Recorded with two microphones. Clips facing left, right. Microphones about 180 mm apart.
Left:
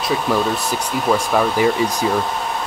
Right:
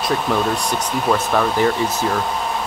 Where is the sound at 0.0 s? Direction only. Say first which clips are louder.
Left 1 dB; 5° left (ahead or behind).